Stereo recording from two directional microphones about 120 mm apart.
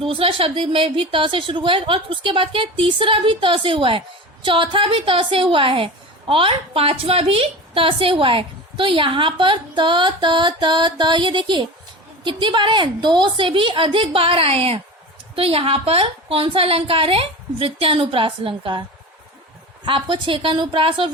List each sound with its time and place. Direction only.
0.0 s a woman's voice: 50° right (ahead or behind)
19.8 s a woman's voice: 45° right (ahead or behind)